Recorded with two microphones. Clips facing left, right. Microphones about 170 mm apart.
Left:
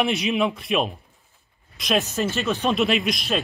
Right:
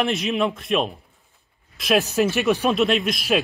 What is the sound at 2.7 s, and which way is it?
Speech, centre (ahead or behind).